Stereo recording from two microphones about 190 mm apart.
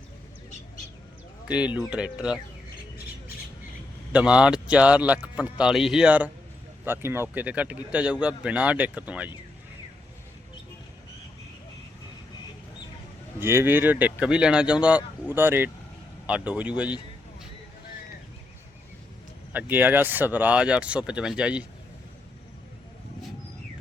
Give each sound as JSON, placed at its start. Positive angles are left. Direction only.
{"t": 1.5, "sound": "a man's voice", "side_deg": -5}
{"t": 4.1, "sound": "a man's voice", "side_deg": -5}
{"t": 13.4, "sound": "a man's voice", "side_deg": -10}
{"t": 19.5, "sound": "a man's voice", "side_deg": -10}